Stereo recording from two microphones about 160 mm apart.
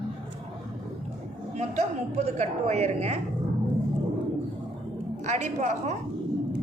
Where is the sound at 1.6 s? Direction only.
45° right (ahead or behind).